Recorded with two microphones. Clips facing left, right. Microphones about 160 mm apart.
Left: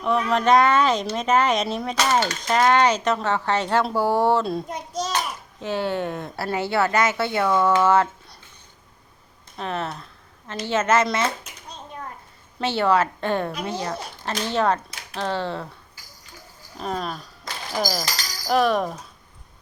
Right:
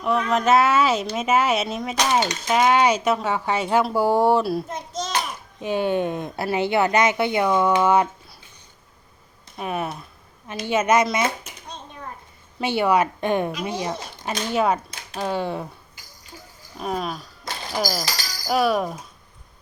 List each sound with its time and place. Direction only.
0.0 s speech: centre (ahead or behind)
4.7 s a child's voice: 10° left (ahead or behind)
5.6 s speech: 15° right (ahead or behind)
9.6 s speech: 10° right (ahead or behind)
12.5 s speech: 15° right (ahead or behind)
16.7 s speech: 5° right (ahead or behind)